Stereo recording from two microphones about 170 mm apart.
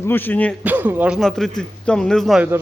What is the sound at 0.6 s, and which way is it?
A man's voice, 10° right (ahead or behind).